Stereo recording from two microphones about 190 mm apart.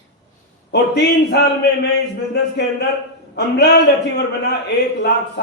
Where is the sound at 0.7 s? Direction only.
65° left (ahead or behind).